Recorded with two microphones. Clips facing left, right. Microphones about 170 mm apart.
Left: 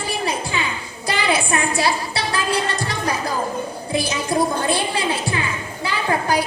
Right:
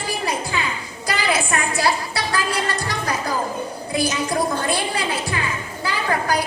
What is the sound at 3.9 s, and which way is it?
Music, 25° left (ahead or behind).